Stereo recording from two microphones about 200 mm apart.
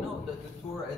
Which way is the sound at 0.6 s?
30° left (ahead or behind).